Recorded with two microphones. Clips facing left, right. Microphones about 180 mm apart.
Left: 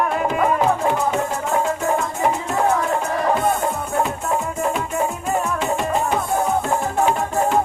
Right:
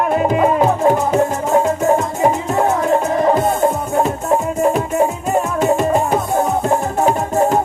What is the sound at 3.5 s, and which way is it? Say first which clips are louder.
Music: right 5 dB; 20° right (ahead or behind).